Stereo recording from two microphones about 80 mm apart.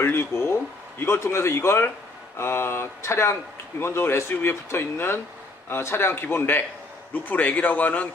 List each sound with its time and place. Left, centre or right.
0.0 s a man's voice: left